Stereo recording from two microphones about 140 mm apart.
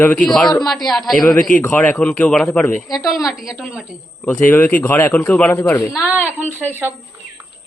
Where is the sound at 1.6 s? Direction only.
10° left (ahead or behind).